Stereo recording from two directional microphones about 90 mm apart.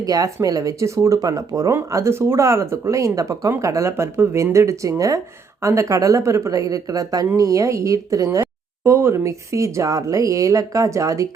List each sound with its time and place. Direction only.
0.0 s speech: 45° right (ahead or behind)